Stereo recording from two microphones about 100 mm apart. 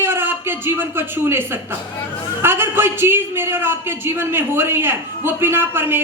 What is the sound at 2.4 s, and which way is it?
A man's voice, 25° right (ahead or behind).